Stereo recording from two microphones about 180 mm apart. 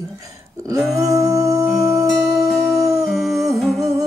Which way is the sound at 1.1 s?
20° right (ahead or behind).